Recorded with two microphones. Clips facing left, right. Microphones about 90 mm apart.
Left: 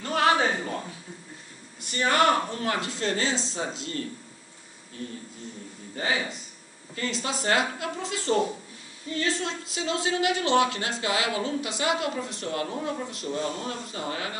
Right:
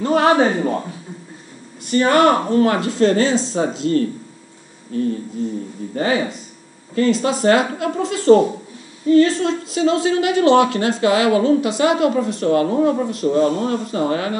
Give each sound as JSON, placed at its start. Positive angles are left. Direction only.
{"t": 0.0, "sound": "speech", "side_deg": -30}
{"t": 1.9, "sound": "speech", "side_deg": -55}